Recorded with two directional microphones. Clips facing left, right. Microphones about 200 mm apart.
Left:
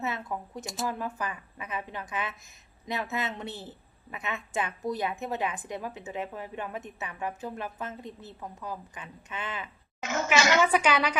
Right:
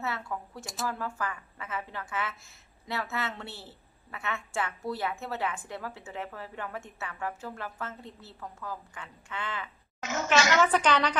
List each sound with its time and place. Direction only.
0.0 s speech: 20° left (ahead or behind)
0.6 s speech: centre (ahead or behind)
0.9 s a woman's voice: 20° left (ahead or behind)
10.0 s a woman's voice: 55° left (ahead or behind)
10.2 s a woman's voice: 10° left (ahead or behind)